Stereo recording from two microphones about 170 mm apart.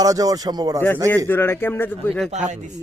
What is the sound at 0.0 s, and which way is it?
Speech, 20° right (ahead or behind).